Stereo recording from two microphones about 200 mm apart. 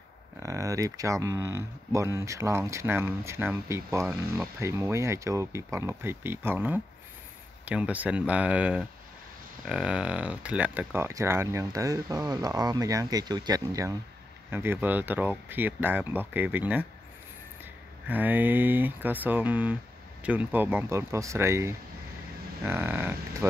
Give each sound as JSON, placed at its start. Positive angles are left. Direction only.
{"t": 0.4, "sound": "speech", "side_deg": -15}
{"t": 18.0, "sound": "speech", "side_deg": -10}